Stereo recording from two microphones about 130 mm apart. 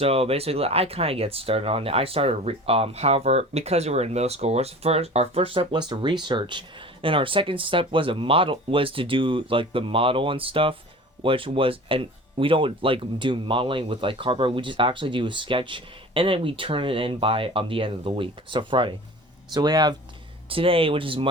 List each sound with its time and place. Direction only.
0.0 s speech: 50° right (ahead or behind); by 20.0 s 30° right (ahead or behind)
20.5 s speech: 45° right (ahead or behind)